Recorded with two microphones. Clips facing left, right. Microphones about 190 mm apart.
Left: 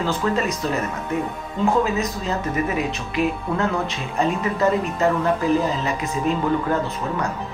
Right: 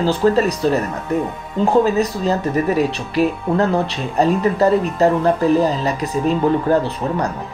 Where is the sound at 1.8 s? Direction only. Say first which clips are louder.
Right 7 dB; 35° right (ahead or behind).